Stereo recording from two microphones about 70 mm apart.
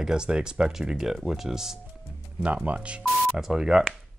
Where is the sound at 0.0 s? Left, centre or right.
Centre.